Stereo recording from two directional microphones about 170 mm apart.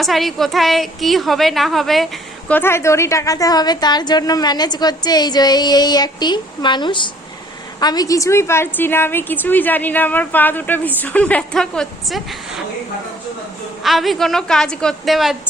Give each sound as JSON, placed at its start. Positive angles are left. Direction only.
{"t": 0.0, "sound": "a woman's voice", "side_deg": 0}
{"t": 2.5, "sound": "a woman's voice", "side_deg": 15}
{"t": 13.8, "sound": "a woman's voice", "side_deg": 0}